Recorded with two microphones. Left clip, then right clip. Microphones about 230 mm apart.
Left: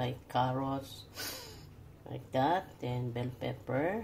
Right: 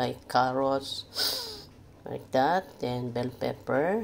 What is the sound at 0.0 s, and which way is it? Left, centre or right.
Speech, right.